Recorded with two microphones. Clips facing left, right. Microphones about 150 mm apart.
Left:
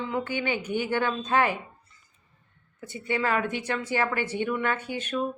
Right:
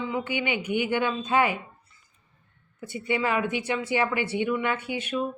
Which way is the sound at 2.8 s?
15° right (ahead or behind).